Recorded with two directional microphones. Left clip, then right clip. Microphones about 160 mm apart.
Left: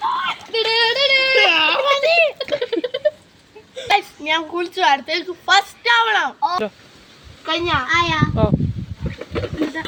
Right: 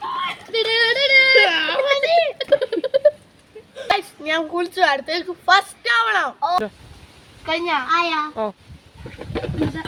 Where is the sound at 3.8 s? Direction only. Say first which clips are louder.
Left 3 dB; 20° right (ahead or behind).